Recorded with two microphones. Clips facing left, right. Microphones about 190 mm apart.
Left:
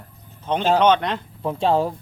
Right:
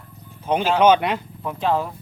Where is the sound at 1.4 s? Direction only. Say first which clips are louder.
Left 4 dB; 30° left (ahead or behind).